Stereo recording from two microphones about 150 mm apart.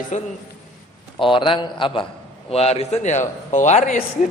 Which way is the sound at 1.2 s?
35° left (ahead or behind).